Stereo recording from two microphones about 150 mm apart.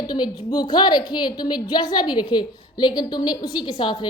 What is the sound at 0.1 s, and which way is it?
A woman's voice, 25° left (ahead or behind).